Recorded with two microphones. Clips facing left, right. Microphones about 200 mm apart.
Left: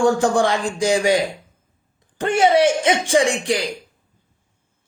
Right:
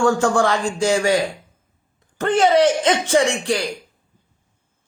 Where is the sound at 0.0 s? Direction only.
15° left (ahead or behind).